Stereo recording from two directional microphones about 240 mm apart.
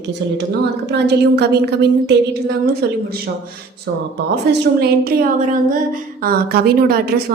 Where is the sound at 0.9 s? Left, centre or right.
Right.